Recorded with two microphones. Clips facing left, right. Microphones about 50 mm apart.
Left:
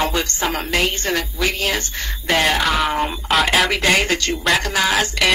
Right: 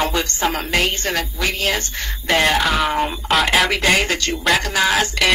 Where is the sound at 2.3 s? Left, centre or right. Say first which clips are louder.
Right 1 dB; centre.